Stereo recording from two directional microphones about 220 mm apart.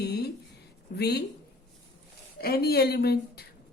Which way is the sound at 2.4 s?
45° left (ahead or behind).